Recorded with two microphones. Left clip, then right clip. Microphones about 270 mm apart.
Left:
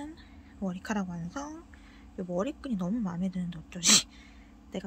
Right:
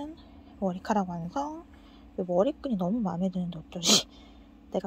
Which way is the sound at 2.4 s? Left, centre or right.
Left.